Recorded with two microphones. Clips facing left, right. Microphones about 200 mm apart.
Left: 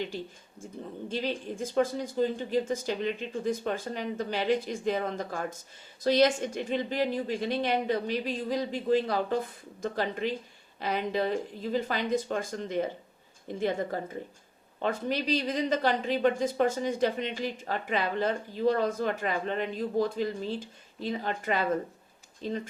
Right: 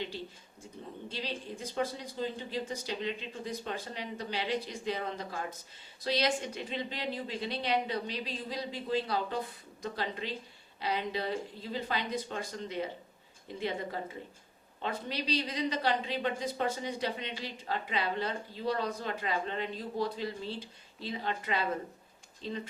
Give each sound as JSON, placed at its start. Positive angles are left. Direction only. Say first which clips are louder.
{"t": 1.0, "sound": "speech", "louder": "left 8 dB", "side_deg": 50}